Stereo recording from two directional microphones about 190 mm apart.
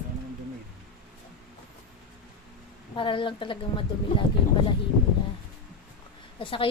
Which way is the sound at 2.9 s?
25° left (ahead or behind).